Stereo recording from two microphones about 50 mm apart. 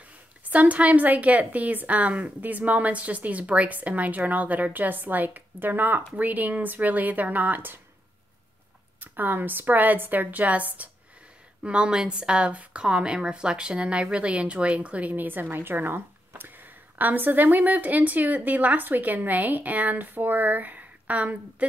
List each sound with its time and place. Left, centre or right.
0.0 s a woman's voice: right
9.0 s speech: right
11.6 s speech: centre